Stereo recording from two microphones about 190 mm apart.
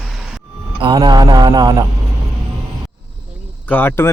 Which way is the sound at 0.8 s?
25° right (ahead or behind).